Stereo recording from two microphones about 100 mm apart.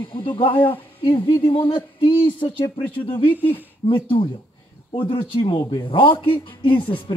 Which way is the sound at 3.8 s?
70° left (ahead or behind).